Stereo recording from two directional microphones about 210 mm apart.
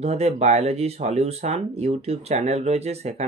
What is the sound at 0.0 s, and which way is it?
Speech, 30° right (ahead or behind).